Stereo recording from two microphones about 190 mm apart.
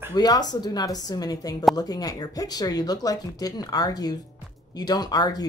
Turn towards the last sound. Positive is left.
turn(degrees=20)  # may be behind; listen again after turning